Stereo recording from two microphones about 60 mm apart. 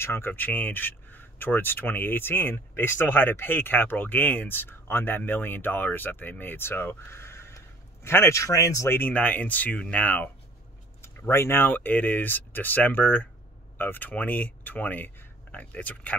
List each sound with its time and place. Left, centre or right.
0.0 s speech: left
8.4 s speech: left
8.8 s speech: left
9.1 s speech: left
11.0 s speech: left